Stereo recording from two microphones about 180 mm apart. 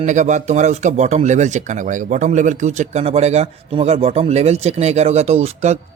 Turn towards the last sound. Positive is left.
turn(degrees=-35)  # may be behind; listen again after turning